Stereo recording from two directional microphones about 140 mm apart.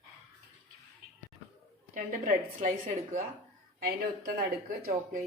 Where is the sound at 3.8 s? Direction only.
90° right.